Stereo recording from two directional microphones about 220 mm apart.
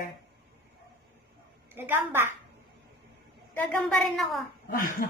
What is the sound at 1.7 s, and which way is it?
Speech, 10° right (ahead or behind).